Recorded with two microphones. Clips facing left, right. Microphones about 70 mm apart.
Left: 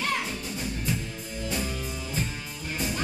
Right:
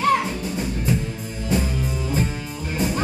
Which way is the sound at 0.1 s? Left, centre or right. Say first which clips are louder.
Right 9 dB; right.